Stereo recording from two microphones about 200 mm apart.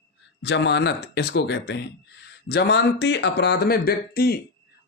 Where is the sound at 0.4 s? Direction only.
60° left (ahead or behind).